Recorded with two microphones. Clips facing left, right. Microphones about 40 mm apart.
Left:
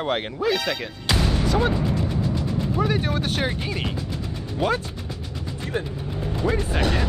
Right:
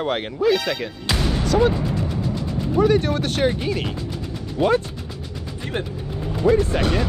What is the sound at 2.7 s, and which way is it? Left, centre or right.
Speech, centre.